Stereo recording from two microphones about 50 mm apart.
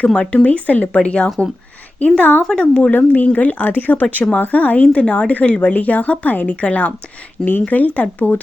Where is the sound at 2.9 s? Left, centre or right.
Left.